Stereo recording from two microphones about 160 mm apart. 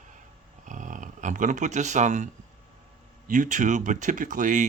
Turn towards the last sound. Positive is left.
turn(degrees=-55)  # may be behind; listen again after turning